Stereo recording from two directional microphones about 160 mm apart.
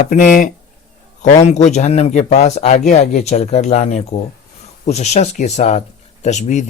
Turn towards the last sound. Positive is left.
turn(degrees=50)  # may be behind; listen again after turning